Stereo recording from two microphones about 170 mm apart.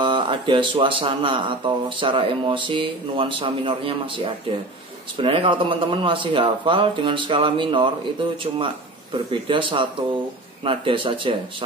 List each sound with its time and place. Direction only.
0.0 s a man's voice: 30° right (ahead or behind)
9.1 s a man's voice: 30° right (ahead or behind)